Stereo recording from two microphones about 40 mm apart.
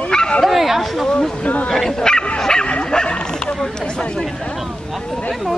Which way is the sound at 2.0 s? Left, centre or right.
Centre.